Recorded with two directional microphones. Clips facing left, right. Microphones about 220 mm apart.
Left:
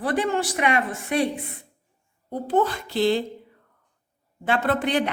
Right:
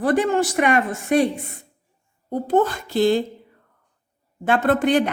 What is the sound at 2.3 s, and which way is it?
Speech, 45° right (ahead or behind).